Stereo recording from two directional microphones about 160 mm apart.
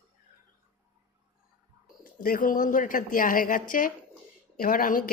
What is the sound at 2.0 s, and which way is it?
A woman's voice, 65° left (ahead or behind).